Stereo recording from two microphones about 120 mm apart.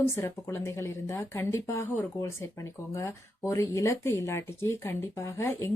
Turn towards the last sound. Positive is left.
turn(degrees=25)  # may be behind; listen again after turning